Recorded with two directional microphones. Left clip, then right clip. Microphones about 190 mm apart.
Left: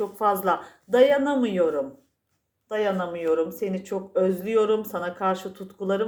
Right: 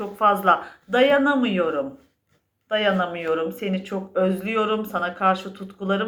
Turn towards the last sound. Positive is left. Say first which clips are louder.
# right 1 dB
turn(degrees=50)  # may be behind; listen again after turning